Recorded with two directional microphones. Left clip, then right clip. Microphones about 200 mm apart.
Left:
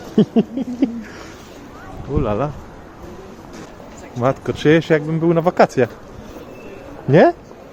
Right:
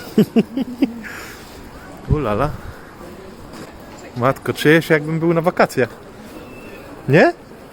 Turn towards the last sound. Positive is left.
turn(degrees=5)  # may be behind; listen again after turning